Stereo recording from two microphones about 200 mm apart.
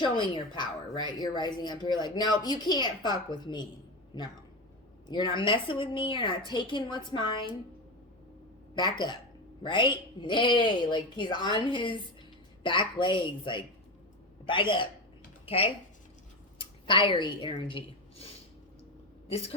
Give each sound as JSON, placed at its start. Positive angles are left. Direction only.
{"t": 0.0, "sound": "speech", "side_deg": 25}
{"t": 8.7, "sound": "speech", "side_deg": 20}
{"t": 16.6, "sound": "a woman's voice", "side_deg": 25}
{"t": 19.3, "sound": "speech", "side_deg": 30}